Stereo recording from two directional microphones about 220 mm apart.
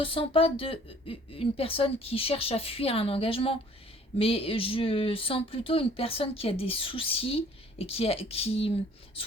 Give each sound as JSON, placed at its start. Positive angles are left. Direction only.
{"t": 0.0, "sound": "speech", "side_deg": 25}